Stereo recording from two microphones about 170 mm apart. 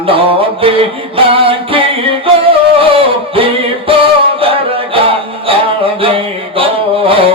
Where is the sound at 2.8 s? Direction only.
30° right (ahead or behind).